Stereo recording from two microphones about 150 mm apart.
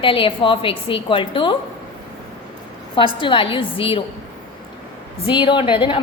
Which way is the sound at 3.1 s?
35° left (ahead or behind).